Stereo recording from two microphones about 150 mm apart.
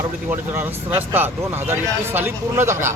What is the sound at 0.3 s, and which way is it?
Speech, 15° right (ahead or behind).